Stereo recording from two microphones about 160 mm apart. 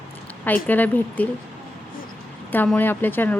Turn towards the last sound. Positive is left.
turn(degrees=10)  # may be behind; listen again after turning